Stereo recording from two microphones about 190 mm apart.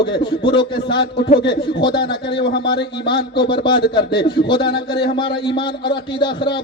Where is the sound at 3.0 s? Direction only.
25° left (ahead or behind).